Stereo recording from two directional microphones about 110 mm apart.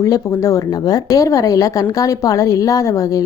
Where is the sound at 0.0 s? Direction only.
30° left (ahead or behind).